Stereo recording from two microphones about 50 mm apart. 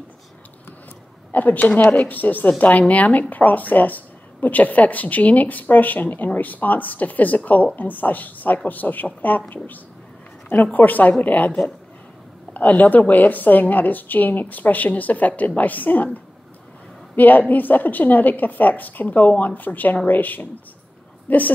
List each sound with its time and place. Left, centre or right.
1.3 s a woman's voice: left
10.5 s a woman's voice: left